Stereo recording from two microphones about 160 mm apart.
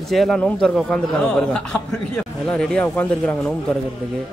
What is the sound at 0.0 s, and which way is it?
A man's voice, centre (ahead or behind).